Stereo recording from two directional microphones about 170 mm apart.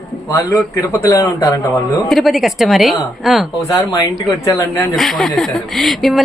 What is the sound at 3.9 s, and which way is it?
Speech, 20° left (ahead or behind).